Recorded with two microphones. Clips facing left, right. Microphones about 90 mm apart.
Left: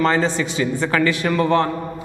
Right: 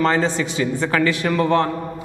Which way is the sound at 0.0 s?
10° left (ahead or behind).